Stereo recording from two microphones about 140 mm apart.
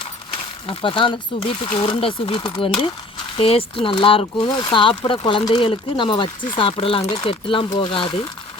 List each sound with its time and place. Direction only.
0.7 s speech: 40° left (ahead or behind)